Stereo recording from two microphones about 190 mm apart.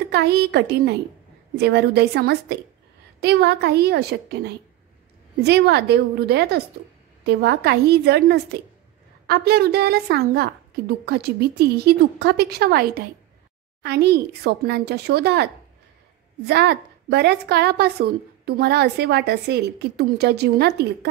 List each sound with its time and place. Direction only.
0.1 s a woman's voice: 60° right (ahead or behind)
16.4 s a woman's voice: 60° right (ahead or behind)